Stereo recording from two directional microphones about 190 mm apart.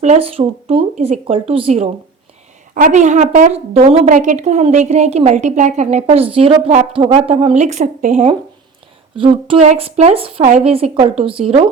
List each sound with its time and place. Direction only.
0.0 s a woman's voice: 35° right (ahead or behind)
9.1 s a woman's voice: 30° right (ahead or behind)